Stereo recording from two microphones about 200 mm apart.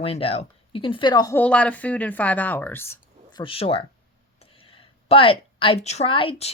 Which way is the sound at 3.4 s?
30° left (ahead or behind).